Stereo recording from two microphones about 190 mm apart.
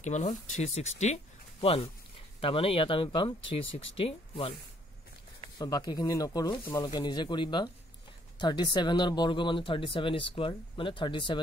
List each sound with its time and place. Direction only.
0.0 s speech: 40° left (ahead or behind)
5.6 s speech: 20° left (ahead or behind)